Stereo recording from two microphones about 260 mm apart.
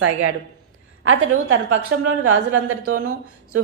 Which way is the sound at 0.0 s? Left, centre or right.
Right.